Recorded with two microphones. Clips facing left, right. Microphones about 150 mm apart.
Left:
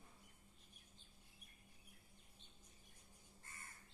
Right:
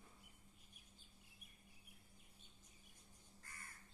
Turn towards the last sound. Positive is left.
turn(degrees=25)  # may be behind; listen again after turning